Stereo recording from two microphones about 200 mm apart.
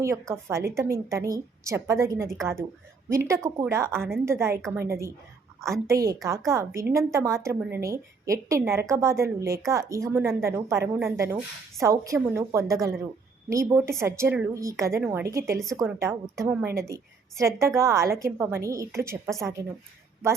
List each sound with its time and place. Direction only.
0.0 s speech: 15° right (ahead or behind)